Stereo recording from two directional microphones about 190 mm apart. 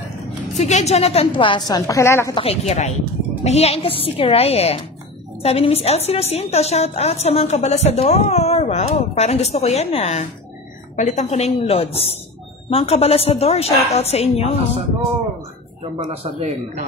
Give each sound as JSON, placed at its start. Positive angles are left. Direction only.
{"t": 0.6, "sound": "a woman's voice", "side_deg": 35}
{"t": 2.3, "sound": "a woman's voice", "side_deg": 35}
{"t": 16.1, "sound": "speech", "side_deg": -30}